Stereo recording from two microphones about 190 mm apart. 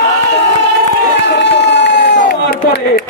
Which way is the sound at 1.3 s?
70° left (ahead or behind).